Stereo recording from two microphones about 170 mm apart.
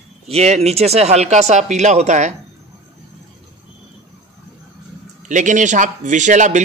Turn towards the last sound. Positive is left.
turn(degrees=-45)  # may be behind; listen again after turning